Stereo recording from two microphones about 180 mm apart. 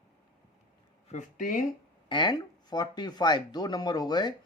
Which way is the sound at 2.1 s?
25° left (ahead or behind).